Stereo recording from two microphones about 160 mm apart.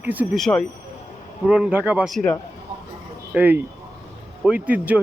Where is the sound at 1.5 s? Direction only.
5° right (ahead or behind).